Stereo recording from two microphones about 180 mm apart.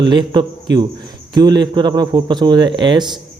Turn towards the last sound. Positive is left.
turn(degrees=-25)  # may be behind; listen again after turning